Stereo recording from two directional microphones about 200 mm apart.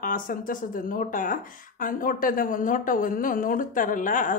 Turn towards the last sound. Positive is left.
turn(degrees=40)  # may be behind; listen again after turning